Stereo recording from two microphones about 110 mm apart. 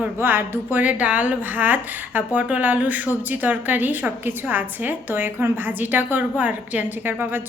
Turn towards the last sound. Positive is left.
turn(degrees=-20)  # may be behind; listen again after turning